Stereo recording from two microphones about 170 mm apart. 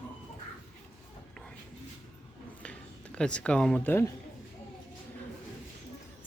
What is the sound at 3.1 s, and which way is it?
Speech, 5° left (ahead or behind).